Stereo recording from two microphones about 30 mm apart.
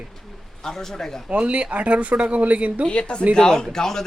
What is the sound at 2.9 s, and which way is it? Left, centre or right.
Speech, left.